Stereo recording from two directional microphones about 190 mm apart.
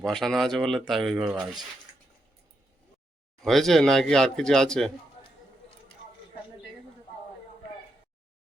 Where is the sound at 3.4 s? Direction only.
Centre (ahead or behind).